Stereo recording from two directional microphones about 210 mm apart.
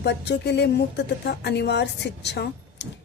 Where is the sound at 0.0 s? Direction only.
55° left (ahead or behind).